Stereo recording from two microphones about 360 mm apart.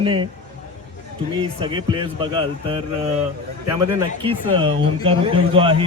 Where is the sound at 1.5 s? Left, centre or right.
Centre.